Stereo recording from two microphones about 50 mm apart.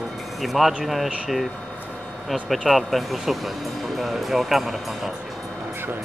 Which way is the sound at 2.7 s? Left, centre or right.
Centre.